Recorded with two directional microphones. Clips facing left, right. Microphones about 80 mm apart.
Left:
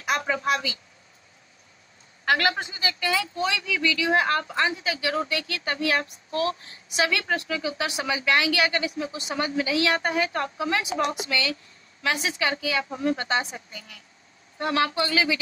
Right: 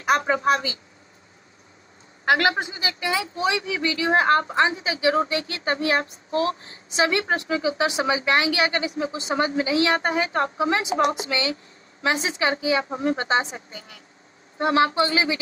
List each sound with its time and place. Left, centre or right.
0.0 s a woman's voice: right
2.2 s a man's voice: centre